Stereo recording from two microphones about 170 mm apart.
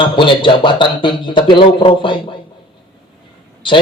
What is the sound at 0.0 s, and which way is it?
Speech, 30° left (ahead or behind).